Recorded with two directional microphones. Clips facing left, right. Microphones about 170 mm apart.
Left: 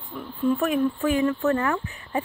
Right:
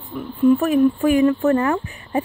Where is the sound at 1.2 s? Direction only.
30° right (ahead or behind).